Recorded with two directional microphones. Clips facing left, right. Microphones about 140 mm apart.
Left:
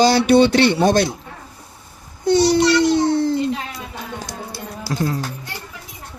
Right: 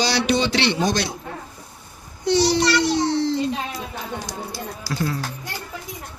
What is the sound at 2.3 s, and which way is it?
Speech, 50° left (ahead or behind).